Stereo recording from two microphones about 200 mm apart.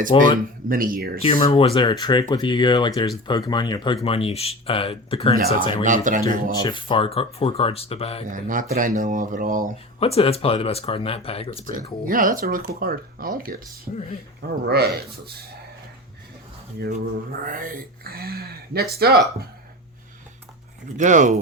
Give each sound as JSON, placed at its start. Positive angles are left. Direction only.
{"t": 0.1, "sound": "speech", "side_deg": 25}
{"t": 0.7, "sound": "speech", "side_deg": -45}
{"t": 1.2, "sound": "speech", "side_deg": 30}
{"t": 5.8, "sound": "speech", "side_deg": -40}
{"t": 6.5, "sound": "speech", "side_deg": 20}
{"t": 8.3, "sound": "speech", "side_deg": -40}
{"t": 10.0, "sound": "speech", "side_deg": 30}
{"t": 12.0, "sound": "speech", "side_deg": -45}
{"t": 17.4, "sound": "speech", "side_deg": -45}
{"t": 20.9, "sound": "speech", "side_deg": -40}